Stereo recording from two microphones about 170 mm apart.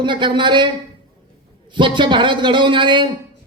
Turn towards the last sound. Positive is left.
turn(degrees=-30)  # may be behind; listen again after turning